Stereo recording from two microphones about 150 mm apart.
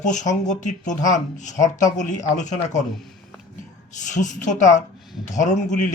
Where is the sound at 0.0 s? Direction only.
55° left (ahead or behind).